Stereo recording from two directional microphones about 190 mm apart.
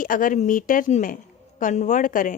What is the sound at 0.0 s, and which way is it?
A woman's voice, 45° left (ahead or behind).